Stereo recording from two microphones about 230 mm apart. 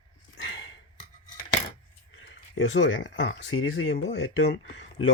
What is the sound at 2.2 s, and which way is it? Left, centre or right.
Speech, left.